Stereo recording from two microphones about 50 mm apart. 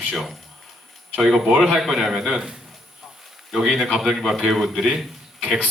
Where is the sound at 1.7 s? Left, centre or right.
Centre.